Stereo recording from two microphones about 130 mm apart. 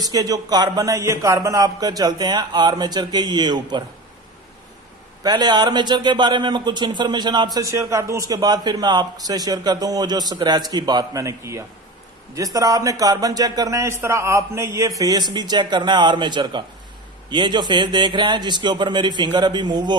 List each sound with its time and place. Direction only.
0.0 s a man's voice: 30° right (ahead or behind)
5.2 s a man's voice: 30° right (ahead or behind)